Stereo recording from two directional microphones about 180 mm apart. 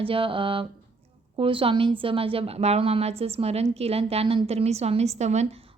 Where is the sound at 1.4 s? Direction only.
30° right (ahead or behind).